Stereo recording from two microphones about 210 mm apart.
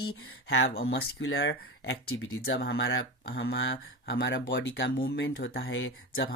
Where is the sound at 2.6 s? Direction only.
55° left (ahead or behind).